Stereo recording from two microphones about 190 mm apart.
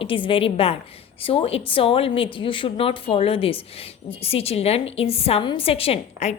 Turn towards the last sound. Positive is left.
turn(degrees=35)  # may be behind; listen again after turning